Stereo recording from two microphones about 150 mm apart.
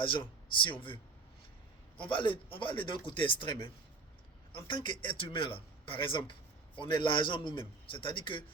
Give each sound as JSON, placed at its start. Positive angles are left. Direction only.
{"t": 0.6, "sound": "a man's voice", "side_deg": 35}
{"t": 2.0, "sound": "a man's voice", "side_deg": 35}
{"t": 4.7, "sound": "a man's voice", "side_deg": 35}